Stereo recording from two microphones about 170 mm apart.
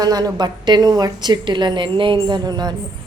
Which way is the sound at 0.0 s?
25° right (ahead or behind).